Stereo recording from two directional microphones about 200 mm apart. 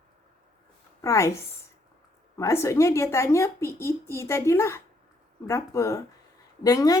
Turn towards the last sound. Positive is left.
turn(degrees=20)  # may be behind; listen again after turning